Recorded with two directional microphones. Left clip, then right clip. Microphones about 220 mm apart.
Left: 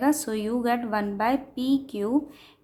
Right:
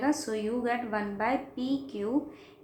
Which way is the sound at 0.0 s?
45° left (ahead or behind).